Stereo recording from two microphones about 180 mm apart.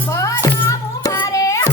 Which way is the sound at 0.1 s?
15° left (ahead or behind).